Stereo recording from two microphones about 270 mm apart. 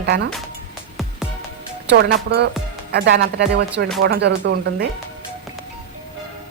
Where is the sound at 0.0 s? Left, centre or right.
Right.